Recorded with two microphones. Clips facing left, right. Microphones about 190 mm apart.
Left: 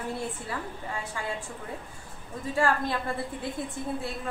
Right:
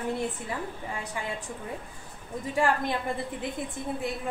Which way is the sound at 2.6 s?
15° right (ahead or behind).